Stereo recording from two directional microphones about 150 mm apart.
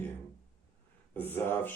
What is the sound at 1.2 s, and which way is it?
Speech, 15° left (ahead or behind).